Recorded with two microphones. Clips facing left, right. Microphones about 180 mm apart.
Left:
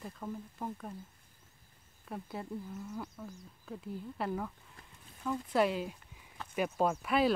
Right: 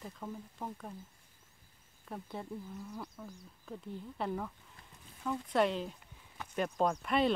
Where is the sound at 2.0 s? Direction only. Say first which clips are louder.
Left 1 dB; centre (ahead or behind).